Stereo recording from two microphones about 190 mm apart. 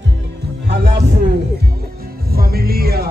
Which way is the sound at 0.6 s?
60° right (ahead or behind).